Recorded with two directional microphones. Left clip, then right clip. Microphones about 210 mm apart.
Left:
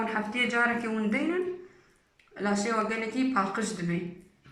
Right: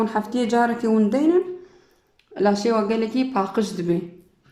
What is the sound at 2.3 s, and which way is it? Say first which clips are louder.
Speech: right 10 dB; 50° right (ahead or behind).